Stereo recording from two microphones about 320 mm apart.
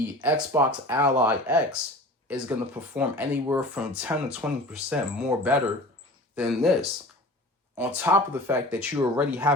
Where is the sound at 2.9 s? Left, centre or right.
Centre.